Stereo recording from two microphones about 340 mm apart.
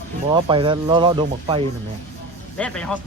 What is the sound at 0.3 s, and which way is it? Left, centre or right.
Speech, centre.